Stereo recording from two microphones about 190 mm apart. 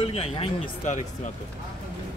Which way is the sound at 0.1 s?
30° left (ahead or behind).